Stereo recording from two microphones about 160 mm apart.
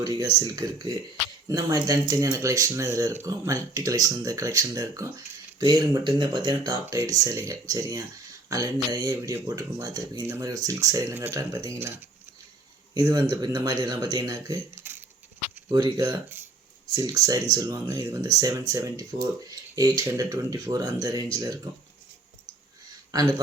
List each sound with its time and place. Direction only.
0.0 s speech: 25° right (ahead or behind)